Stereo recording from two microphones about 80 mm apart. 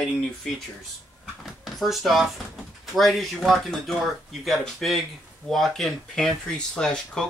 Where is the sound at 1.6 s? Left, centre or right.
Centre.